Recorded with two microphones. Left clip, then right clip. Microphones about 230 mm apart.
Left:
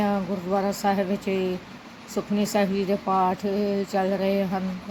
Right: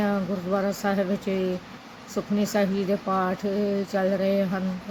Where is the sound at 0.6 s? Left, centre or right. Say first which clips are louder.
Left 1 dB; centre.